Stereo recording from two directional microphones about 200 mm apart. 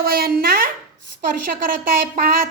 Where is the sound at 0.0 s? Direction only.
50° right (ahead or behind).